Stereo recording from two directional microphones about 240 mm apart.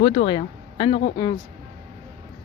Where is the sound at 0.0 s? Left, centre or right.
Left.